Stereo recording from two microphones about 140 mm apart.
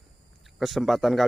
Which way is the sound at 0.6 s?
Centre (ahead or behind).